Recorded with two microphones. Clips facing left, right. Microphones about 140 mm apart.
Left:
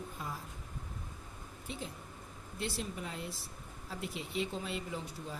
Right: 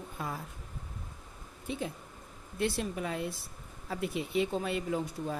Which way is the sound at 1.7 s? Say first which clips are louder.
Right 7 dB; 60° right (ahead or behind).